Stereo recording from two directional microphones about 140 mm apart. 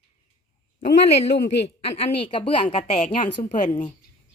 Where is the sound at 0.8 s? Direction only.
50° left (ahead or behind).